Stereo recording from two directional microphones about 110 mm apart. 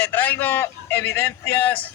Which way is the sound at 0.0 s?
15° left (ahead or behind).